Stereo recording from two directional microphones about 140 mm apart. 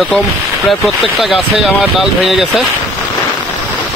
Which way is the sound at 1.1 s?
Centre (ahead or behind).